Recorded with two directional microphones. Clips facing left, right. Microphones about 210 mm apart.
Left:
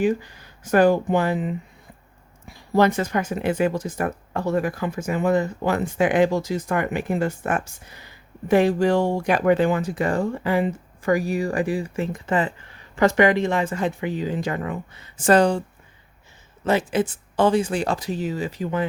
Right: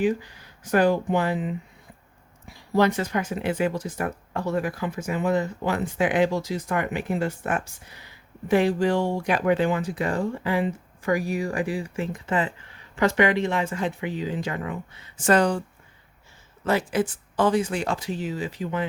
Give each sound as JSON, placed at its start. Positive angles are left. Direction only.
{"t": 0.0, "sound": "speech", "side_deg": 45}
{"t": 2.7, "sound": "speech", "side_deg": 45}
{"t": 15.2, "sound": "speech", "side_deg": 30}
{"t": 16.9, "sound": "speech", "side_deg": 25}